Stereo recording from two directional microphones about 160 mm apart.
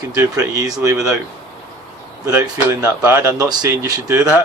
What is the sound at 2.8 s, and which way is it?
Speech, 15° right (ahead or behind).